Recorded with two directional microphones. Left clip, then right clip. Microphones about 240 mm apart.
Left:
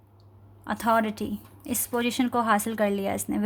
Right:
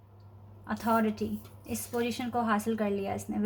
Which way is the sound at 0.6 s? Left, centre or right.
Left.